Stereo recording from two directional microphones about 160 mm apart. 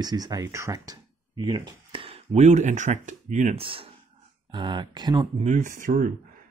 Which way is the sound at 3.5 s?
35° right (ahead or behind).